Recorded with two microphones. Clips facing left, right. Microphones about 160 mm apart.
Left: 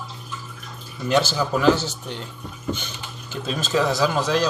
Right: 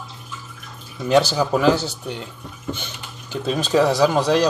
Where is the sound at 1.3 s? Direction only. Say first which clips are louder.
Right 1 dB; 15° right (ahead or behind).